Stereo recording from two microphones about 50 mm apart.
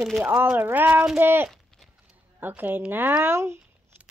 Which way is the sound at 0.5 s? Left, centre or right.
Right.